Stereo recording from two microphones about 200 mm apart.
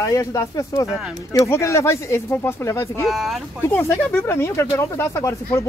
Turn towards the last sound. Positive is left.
turn(degrees=15)  # may be behind; listen again after turning